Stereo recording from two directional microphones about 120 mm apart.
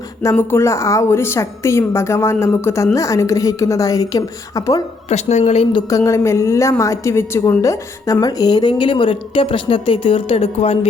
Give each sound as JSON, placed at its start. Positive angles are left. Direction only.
{"t": 0.2, "sound": "a woman's voice", "side_deg": 20}
{"t": 5.0, "sound": "a woman's voice", "side_deg": 65}
{"t": 6.0, "sound": "a woman's voice", "side_deg": 25}